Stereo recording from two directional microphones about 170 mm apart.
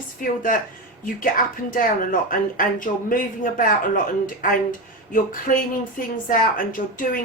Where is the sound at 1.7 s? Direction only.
55° left (ahead or behind).